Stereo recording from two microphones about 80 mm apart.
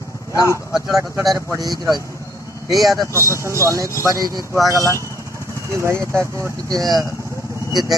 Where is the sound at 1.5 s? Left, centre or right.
Right.